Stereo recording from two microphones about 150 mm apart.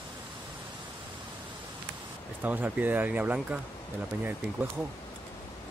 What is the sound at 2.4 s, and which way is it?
Speech, 10° right (ahead or behind).